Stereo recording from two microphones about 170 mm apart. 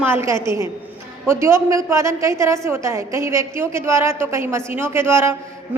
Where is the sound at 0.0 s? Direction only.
15° right (ahead or behind).